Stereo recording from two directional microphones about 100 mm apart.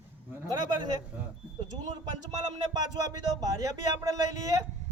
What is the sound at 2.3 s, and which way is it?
Speech, 45° right (ahead or behind).